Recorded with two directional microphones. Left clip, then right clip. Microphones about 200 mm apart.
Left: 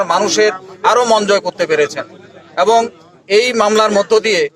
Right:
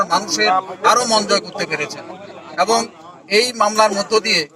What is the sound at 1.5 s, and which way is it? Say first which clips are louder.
Speech: left 7 dB; 25° left (ahead or behind).